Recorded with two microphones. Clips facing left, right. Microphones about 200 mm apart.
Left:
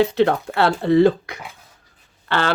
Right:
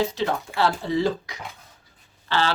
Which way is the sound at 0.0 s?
60° left (ahead or behind).